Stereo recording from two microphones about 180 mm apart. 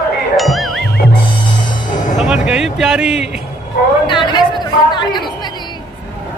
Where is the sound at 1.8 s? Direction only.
45° left (ahead or behind).